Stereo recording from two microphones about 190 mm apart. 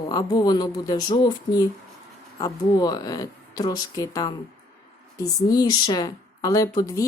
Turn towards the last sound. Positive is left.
turn(degrees=20)  # may be behind; listen again after turning